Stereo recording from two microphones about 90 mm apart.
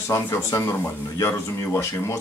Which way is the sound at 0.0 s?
30° left (ahead or behind).